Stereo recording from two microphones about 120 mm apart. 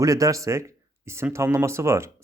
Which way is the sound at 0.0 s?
30° right (ahead or behind).